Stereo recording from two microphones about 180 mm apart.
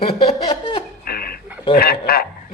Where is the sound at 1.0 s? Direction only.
55° left (ahead or behind).